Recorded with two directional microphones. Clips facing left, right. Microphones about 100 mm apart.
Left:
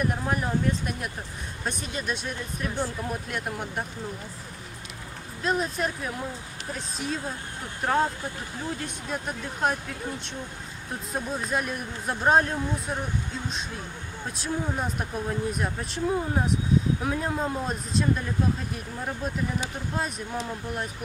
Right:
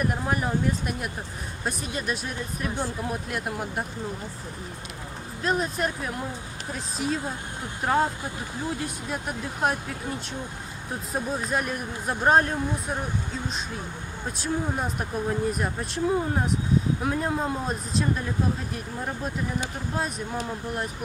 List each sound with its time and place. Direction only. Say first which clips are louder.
0.0 s speech: right 1 dB; 5° right (ahead or behind)
2.7 s speech: left 1 dB; 15° right (ahead or behind)
3.1 s speech: right 1 dB; 5° right (ahead or behind)
5.4 s speech: right 1 dB; centre (ahead or behind)
14.3 s speech: right 2 dB; centre (ahead or behind)